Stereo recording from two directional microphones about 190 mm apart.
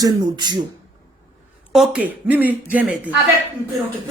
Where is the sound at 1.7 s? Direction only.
5° right (ahead or behind).